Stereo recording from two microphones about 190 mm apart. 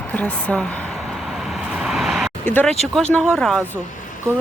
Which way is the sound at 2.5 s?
10° left (ahead or behind).